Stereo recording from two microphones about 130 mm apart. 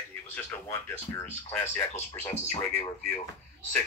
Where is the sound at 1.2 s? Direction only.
15° left (ahead or behind).